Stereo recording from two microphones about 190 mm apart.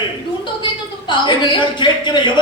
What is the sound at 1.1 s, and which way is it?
A man's voice, 25° left (ahead or behind).